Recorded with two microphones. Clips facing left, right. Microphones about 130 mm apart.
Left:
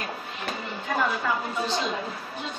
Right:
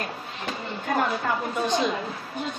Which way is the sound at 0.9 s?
50° right (ahead or behind).